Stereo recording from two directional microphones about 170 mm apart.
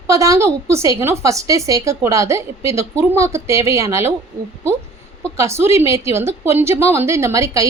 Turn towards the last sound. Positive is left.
turn(degrees=-20)  # may be behind; listen again after turning